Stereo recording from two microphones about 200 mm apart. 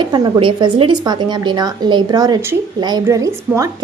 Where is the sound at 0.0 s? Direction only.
25° right (ahead or behind).